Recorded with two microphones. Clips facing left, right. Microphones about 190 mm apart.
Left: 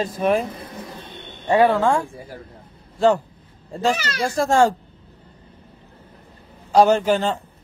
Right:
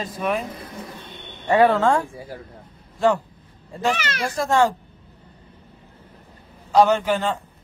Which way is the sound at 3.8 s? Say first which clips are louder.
Left 2 dB; 35° left (ahead or behind).